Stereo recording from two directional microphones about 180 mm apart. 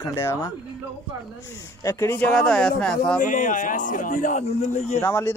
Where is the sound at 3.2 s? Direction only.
45° left (ahead or behind).